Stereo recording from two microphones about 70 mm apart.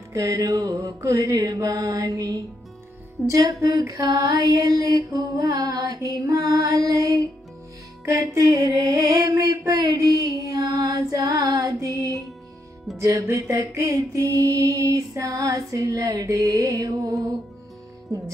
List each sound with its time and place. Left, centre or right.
0.1 s music: right
1.6 s mantra: right